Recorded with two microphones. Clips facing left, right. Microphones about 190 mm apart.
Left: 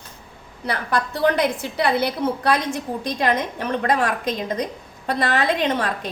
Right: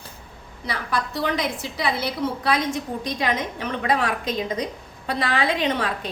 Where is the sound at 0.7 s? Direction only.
60° left (ahead or behind).